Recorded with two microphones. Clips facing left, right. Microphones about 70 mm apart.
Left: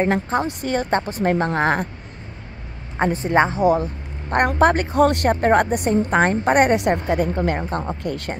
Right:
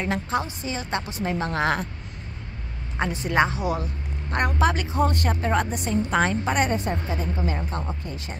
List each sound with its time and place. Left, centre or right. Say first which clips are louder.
0.0 s a woman's voice: left 6 dB; left
0.5 s a woman's voice: left 8 dB; left
3.0 s a woman's voice: left 5 dB; left
5.3 s a woman's voice: left 8 dB; left
6.7 s a woman's voice: left 8 dB; left